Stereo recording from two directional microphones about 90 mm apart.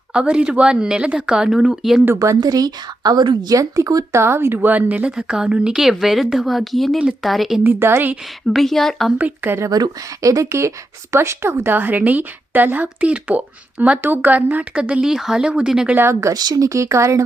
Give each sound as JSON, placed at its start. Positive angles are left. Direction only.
{"t": 0.1, "sound": "a woman's voice", "side_deg": -10}
{"t": 2.1, "sound": "a woman's voice", "side_deg": -40}
{"t": 7.6, "sound": "a woman's voice", "side_deg": -25}
{"t": 8.5, "sound": "a woman's voice", "side_deg": 5}
{"t": 9.1, "sound": "a woman's voice", "side_deg": -20}
{"t": 9.6, "sound": "a woman's voice", "side_deg": -45}
{"t": 16.0, "sound": "a woman's voice", "side_deg": -30}
{"t": 16.3, "sound": "speech", "side_deg": -45}